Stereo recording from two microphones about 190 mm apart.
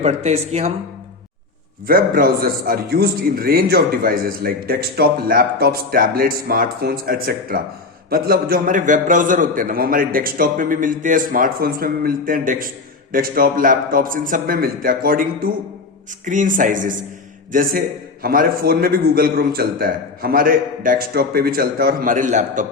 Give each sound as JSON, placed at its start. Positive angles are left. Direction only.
{"t": 0.0, "sound": "speech", "side_deg": -35}
{"t": 1.9, "sound": "a man's voice", "side_deg": -50}